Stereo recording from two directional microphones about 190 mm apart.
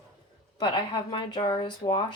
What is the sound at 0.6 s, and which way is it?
A woman's voice, 25° left (ahead or behind).